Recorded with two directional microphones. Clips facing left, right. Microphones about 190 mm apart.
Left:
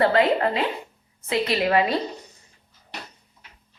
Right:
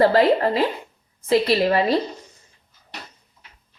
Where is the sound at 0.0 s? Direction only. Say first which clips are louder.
Right 3 dB; 35° right (ahead or behind).